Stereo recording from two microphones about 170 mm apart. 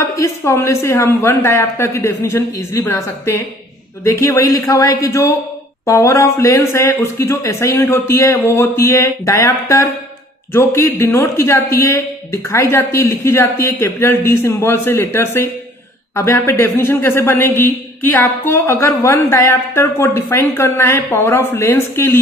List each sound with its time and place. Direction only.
0.0 s speech: 15° left (ahead or behind)